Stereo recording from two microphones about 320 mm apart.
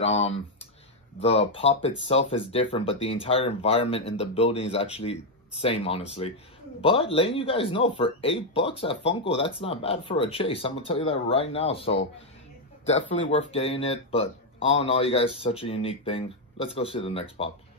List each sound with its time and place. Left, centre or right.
0.0 s speech: centre
13.3 s speech: centre